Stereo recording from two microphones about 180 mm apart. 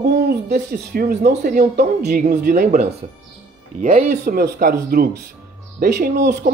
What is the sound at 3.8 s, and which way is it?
Speech, 45° right (ahead or behind).